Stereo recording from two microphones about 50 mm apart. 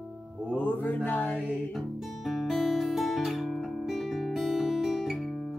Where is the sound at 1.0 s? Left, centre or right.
Left.